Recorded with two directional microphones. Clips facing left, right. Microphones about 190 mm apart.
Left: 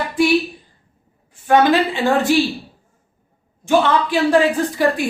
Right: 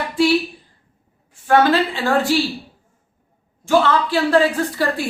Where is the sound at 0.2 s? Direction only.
15° left (ahead or behind).